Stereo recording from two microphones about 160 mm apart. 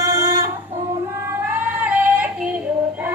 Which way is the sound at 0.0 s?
20° right (ahead or behind).